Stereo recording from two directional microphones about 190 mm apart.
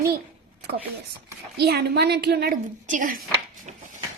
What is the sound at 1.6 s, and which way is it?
A woman's voice, 60° right (ahead or behind).